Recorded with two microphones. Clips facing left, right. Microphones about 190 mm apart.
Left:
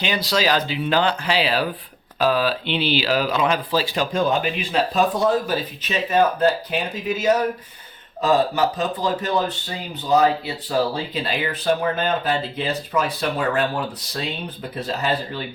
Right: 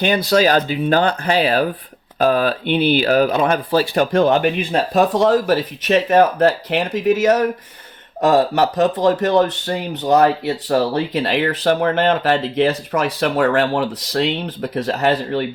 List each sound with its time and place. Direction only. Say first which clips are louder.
0.0 s speech: right 7 dB; 55° right (ahead or behind)
5.1 s speech: right 5 dB; 90° right
8.2 s speech: right 4 dB; 75° right (ahead or behind)